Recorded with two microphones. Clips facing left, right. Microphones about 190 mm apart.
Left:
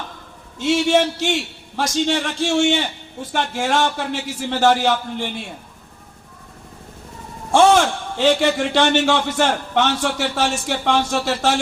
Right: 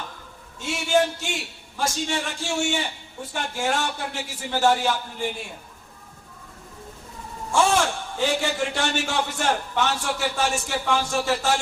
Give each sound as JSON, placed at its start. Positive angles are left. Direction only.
{"t": 0.6, "sound": "a man's voice", "side_deg": 85}
{"t": 7.5, "sound": "a man's voice", "side_deg": 80}